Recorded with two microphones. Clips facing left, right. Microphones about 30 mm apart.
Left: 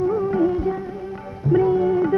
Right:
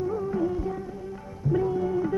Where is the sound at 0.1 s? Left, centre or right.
Left.